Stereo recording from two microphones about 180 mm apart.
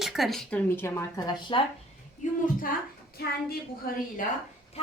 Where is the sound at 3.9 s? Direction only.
55° left (ahead or behind).